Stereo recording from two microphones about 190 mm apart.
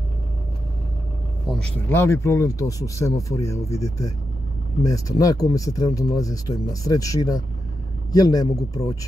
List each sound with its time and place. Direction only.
1.6 s speech: 10° left (ahead or behind)